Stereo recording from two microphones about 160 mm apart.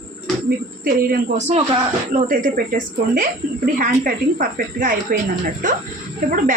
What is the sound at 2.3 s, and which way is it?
Speech, 60° right (ahead or behind).